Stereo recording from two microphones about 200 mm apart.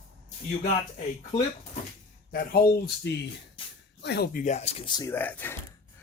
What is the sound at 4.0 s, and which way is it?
Speech, 55° left (ahead or behind).